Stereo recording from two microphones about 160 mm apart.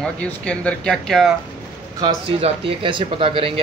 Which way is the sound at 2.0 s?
35° right (ahead or behind).